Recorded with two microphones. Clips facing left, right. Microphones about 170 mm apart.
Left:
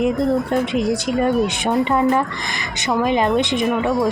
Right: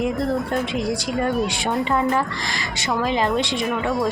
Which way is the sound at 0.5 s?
20° left (ahead or behind).